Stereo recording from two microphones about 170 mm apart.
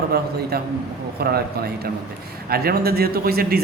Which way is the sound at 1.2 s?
65° right (ahead or behind).